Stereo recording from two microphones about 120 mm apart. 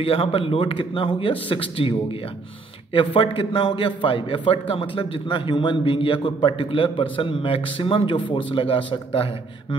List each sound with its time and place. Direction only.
0.0 s a man's voice: 50° left (ahead or behind)